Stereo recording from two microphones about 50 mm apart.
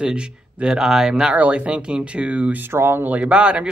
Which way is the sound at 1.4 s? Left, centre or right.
Right.